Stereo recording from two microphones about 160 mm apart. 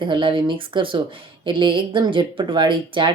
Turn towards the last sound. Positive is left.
turn(degrees=-30)  # may be behind; listen again after turning